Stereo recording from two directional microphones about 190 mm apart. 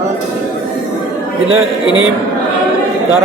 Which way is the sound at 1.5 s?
90° right.